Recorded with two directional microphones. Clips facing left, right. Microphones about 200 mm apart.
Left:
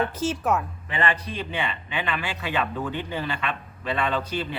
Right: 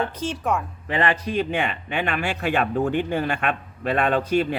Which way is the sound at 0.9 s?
40° right (ahead or behind).